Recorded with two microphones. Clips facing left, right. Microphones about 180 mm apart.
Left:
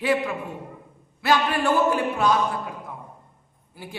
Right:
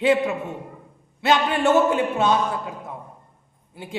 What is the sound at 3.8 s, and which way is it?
Speech, 25° right (ahead or behind).